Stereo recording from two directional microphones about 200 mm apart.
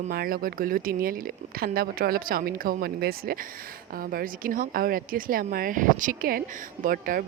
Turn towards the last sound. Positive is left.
turn(degrees=-45)  # may be behind; listen again after turning